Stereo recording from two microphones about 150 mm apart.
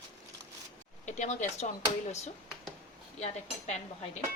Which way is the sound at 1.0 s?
50° left (ahead or behind).